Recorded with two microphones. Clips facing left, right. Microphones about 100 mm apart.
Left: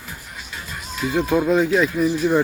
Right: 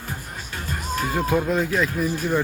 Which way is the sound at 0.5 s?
45° right (ahead or behind).